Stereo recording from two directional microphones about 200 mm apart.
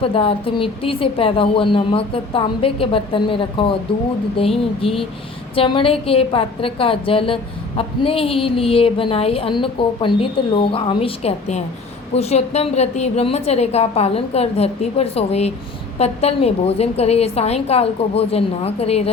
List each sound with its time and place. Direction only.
0.0 s a woman's voice: 25° left (ahead or behind)